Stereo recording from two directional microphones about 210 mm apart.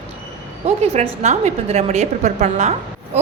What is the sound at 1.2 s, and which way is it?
A woman's voice, 35° right (ahead or behind).